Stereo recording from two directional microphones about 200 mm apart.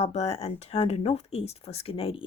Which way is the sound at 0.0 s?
30° left (ahead or behind).